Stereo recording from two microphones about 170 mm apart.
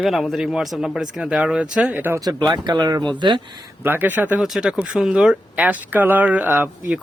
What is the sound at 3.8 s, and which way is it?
Speech, 10° right (ahead or behind).